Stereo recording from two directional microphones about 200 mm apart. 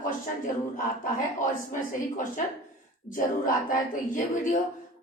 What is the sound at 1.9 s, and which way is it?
Speech, 40° left (ahead or behind).